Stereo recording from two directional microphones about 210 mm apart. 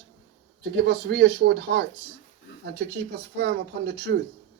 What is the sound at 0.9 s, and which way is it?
Speech, 55° right (ahead or behind).